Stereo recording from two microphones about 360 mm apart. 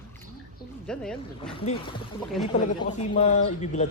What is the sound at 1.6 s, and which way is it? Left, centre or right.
Speech, centre.